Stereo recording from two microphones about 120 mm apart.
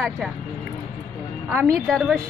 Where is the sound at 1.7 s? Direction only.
5° left (ahead or behind).